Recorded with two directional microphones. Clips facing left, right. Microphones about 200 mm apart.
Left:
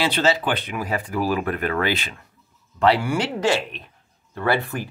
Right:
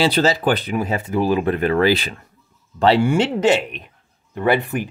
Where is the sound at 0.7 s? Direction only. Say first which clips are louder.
Right 5 dB; 25° right (ahead or behind).